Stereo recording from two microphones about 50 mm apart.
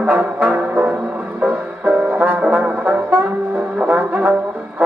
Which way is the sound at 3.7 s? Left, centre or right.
Right.